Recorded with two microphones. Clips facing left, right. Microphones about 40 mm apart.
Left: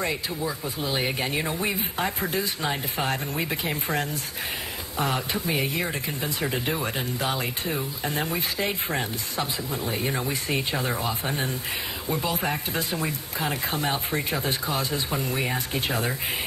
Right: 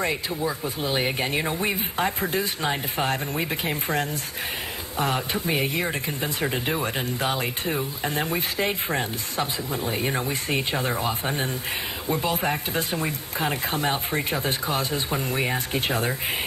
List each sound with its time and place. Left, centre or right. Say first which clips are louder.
0.4 s speech: right 2 dB; right
2.1 s speech: right 2 dB; right
3.4 s speech: right 1 dB; right
4.9 s speech: right 1 dB; right